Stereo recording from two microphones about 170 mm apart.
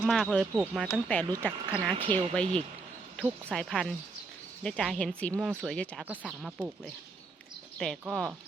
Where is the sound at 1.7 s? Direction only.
30° right (ahead or behind).